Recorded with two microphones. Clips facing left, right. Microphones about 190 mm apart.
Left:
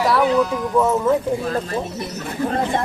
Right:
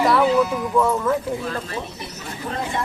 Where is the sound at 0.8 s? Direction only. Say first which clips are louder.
Left 2 dB; 20° left (ahead or behind).